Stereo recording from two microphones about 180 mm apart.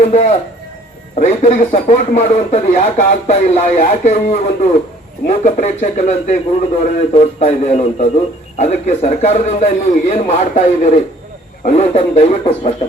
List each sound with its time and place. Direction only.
0.1 s speech: 40° left (ahead or behind)